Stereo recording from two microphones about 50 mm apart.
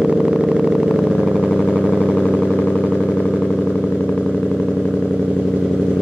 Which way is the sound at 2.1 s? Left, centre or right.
Left.